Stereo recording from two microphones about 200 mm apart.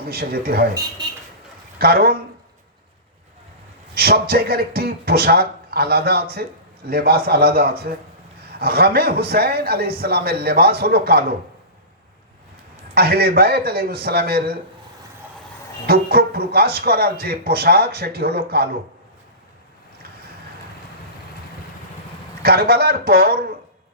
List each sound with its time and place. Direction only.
0.0 s speech: 50° right (ahead or behind)
1.8 s speech: 50° right (ahead or behind)
3.9 s speech: 50° right (ahead or behind)
12.9 s speech: 50° right (ahead or behind)
15.9 s speech: 50° right (ahead or behind)
22.4 s speech: 50° right (ahead or behind)